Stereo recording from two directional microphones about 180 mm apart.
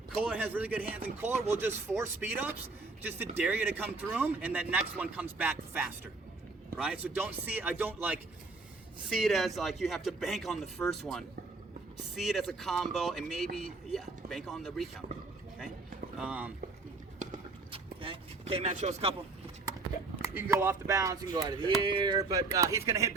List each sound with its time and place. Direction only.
0.1 s speech: 10° right (ahead or behind)
9.0 s speech: 5° right (ahead or behind)
12.2 s speech: centre (ahead or behind)
16.1 s speech: 10° right (ahead or behind)
17.2 s horse: 45° right (ahead or behind)
17.7 s a sound: 30° right (ahead or behind)
20.2 s speech: 10° right (ahead or behind)